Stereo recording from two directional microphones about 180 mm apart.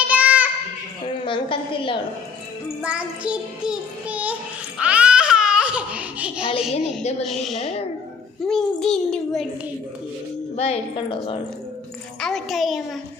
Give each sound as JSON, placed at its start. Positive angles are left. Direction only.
{"t": 0.1, "sound": "a sound", "side_deg": -10}
{"t": 1.0, "sound": "a sound", "side_deg": 30}
{"t": 2.8, "sound": "music", "side_deg": -5}
{"t": 4.8, "sound": "a sound", "side_deg": -5}
{"t": 6.8, "sound": "speech", "side_deg": 35}
{"t": 7.3, "sound": "a child's voice", "side_deg": 0}
{"t": 7.6, "sound": "speech", "side_deg": 35}
{"t": 8.4, "sound": "a child's voice", "side_deg": 0}
{"t": 10.6, "sound": "a woman's voice", "side_deg": 30}
{"t": 12.2, "sound": "a child's voice", "side_deg": 0}